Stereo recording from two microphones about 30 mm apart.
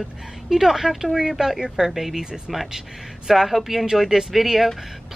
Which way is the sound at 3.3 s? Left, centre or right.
Centre.